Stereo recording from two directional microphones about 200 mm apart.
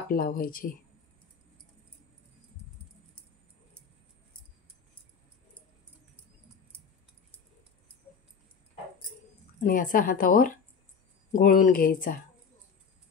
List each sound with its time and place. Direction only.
0.1 s a woman's voice: 45° left (ahead or behind)
9.6 s a woman's voice: 40° left (ahead or behind)